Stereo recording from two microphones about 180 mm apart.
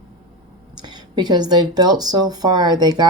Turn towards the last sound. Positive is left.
turn(degrees=-25)  # may be behind; listen again after turning